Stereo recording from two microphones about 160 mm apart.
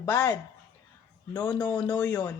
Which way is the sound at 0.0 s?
15° left (ahead or behind).